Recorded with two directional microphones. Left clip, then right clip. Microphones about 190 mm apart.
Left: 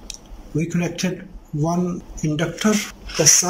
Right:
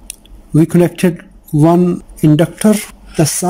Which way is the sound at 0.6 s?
45° right (ahead or behind).